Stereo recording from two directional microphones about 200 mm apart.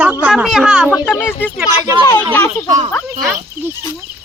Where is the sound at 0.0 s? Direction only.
10° right (ahead or behind).